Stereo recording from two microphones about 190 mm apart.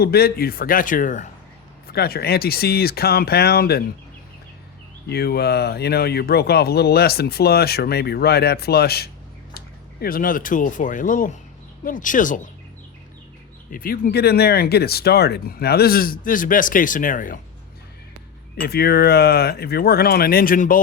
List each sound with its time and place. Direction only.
0.0 s speech: 55° left (ahead or behind)
1.9 s speech: 55° left (ahead or behind)
5.0 s speech: 55° left (ahead or behind)
13.7 s speech: 50° left (ahead or behind)
18.6 s speech: 55° left (ahead or behind)